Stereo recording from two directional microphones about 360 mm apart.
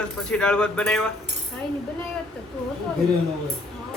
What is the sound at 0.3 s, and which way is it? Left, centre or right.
Speech, centre.